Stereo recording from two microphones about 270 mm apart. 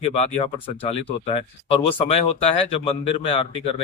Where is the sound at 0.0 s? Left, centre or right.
Left.